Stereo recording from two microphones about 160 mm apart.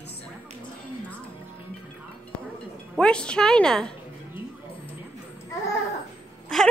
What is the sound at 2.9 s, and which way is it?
A woman's voice, 5° left (ahead or behind).